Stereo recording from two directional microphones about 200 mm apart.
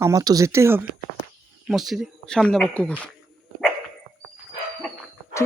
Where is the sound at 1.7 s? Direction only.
Centre (ahead or behind).